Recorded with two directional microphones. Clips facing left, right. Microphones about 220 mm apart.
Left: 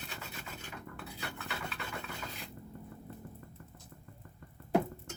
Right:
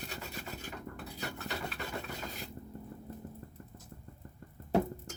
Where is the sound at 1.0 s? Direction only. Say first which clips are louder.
Right 2 dB; 40° right (ahead or behind).